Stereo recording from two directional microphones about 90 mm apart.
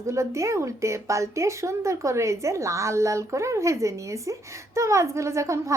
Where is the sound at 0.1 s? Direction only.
35° right (ahead or behind).